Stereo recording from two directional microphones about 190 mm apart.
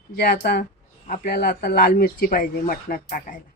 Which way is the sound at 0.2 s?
55° left (ahead or behind).